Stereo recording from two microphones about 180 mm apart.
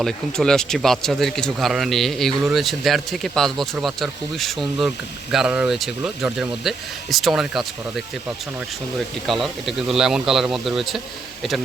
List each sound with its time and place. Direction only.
0.0 s speech: 5° left (ahead or behind)
9.2 s speech: centre (ahead or behind)